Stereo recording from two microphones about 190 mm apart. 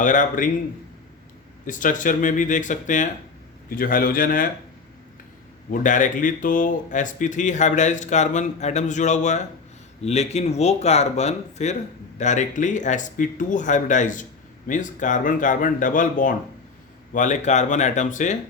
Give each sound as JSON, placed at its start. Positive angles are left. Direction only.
{"t": 0.0, "sound": "speech", "side_deg": 40}
{"t": 1.6, "sound": "speech", "side_deg": 45}
{"t": 5.7, "sound": "speech", "side_deg": 40}